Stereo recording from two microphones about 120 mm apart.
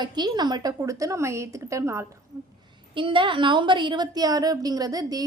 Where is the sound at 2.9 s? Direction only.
45° right (ahead or behind).